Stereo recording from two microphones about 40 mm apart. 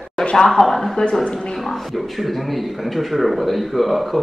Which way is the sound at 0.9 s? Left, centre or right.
Centre.